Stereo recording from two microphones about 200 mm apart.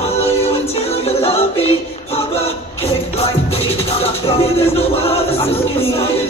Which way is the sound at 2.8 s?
30° left (ahead or behind).